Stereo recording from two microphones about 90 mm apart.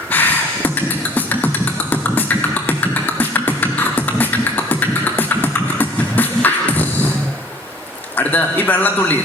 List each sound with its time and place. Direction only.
0.1 s a sound: 20° left (ahead or behind)
1.1 s beatboxing: 20° left (ahead or behind)
2.6 s beatboxing: 20° left (ahead or behind)
8.1 s a man's voice: 20° left (ahead or behind)